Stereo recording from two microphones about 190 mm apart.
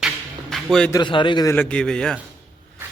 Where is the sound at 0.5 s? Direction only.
5° left (ahead or behind).